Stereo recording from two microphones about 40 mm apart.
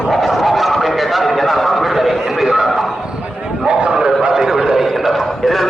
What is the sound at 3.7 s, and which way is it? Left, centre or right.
Bow-wow, centre.